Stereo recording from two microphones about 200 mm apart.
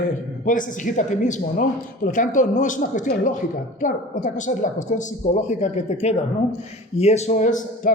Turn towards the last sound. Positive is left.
turn(degrees=40)  # may be behind; listen again after turning